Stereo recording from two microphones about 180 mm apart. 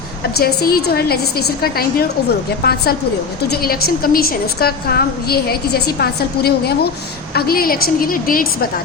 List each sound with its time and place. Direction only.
0.3 s a woman's voice: 60° left (ahead or behind)